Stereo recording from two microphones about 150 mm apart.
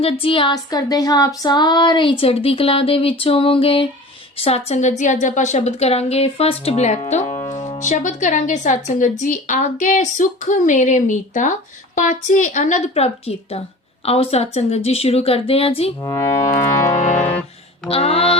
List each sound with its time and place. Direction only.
0.0 s a woman's voice: 40° left (ahead or behind)
16.0 s a woman's voice: 25° left (ahead or behind)
17.0 s music: 55° left (ahead or behind)
17.8 s speech: 40° left (ahead or behind)